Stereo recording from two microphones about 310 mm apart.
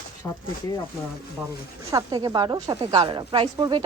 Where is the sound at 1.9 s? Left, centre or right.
Centre.